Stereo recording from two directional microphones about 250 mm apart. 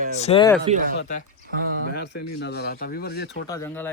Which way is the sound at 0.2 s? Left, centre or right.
Left.